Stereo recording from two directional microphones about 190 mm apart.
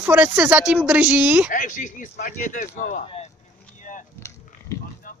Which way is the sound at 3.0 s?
30° left (ahead or behind).